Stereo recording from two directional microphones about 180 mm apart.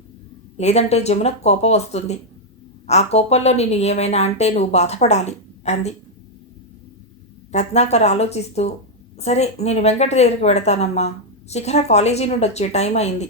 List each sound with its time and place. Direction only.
0.5 s a woman's voice: 35° left (ahead or behind)
7.5 s a woman's voice: 40° left (ahead or behind)